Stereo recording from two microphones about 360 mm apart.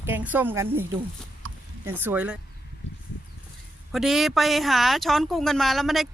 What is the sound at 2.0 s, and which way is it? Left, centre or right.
Speech, centre.